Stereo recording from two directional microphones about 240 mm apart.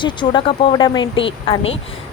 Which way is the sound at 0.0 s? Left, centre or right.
Centre.